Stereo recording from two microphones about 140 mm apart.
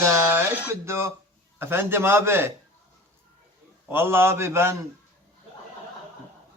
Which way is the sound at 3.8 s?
15° right (ahead or behind).